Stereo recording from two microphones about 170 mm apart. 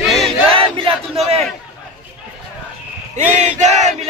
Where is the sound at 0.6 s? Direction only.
35° right (ahead or behind).